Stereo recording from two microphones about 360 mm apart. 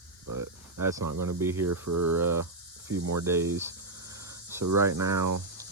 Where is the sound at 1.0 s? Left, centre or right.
Right.